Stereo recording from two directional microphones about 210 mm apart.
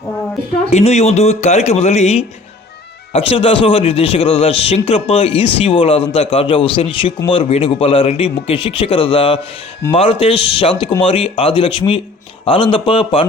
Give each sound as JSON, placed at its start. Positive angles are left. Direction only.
{"t": 0.7, "sound": "a man's voice", "side_deg": 30}